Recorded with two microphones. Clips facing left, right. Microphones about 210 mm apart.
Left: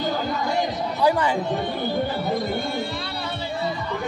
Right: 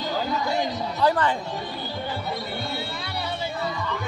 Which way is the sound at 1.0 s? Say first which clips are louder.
Left 1 dB; 10° left (ahead or behind).